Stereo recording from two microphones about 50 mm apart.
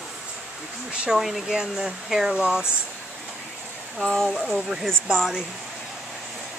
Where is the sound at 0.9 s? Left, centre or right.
Right.